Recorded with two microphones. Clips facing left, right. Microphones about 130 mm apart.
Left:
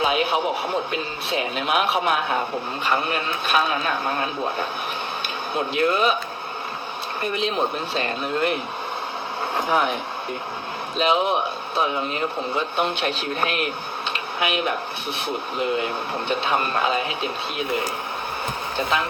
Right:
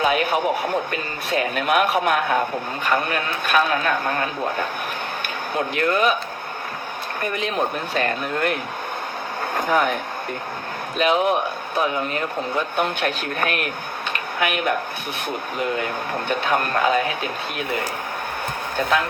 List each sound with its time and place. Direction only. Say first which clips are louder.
0.0 s speech: right 1 dB; 55° right (ahead or behind)
7.2 s speech: even; 50° right (ahead or behind)
9.6 s speech: right 2 dB; 50° right (ahead or behind)